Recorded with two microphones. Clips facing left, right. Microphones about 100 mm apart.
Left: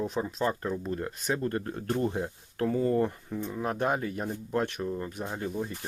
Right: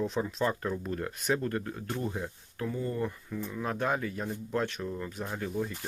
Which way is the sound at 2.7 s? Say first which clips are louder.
Left 9 dB; 75° left (ahead or behind).